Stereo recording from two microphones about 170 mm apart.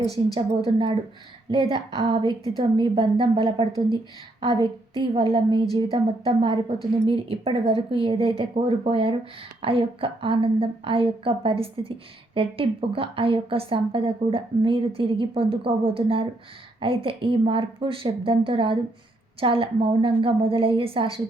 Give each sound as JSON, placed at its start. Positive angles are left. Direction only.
{"t": 0.3, "sound": "a woman's voice", "side_deg": -30}